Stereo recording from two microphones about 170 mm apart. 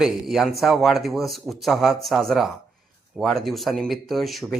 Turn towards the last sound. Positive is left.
turn(degrees=0)  # may be behind; listen again after turning